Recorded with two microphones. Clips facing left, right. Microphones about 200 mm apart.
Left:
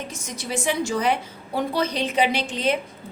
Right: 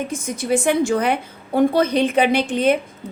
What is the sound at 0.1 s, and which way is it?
A woman's voice, 55° right (ahead or behind).